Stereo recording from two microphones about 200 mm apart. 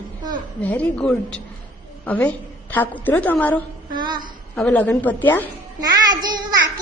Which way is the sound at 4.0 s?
20° right (ahead or behind).